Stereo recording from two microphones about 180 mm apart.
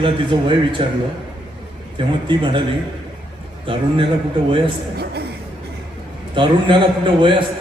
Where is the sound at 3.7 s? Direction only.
30° right (ahead or behind).